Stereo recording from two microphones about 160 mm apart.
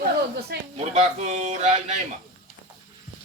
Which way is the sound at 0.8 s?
45° right (ahead or behind).